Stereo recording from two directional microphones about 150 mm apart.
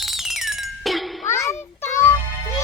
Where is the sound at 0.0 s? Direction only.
Centre (ahead or behind).